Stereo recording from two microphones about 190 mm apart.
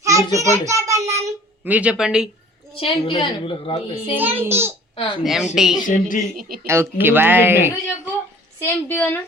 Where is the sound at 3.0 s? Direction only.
30° left (ahead or behind).